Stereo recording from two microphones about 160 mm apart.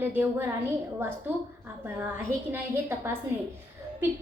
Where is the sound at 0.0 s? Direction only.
10° right (ahead or behind).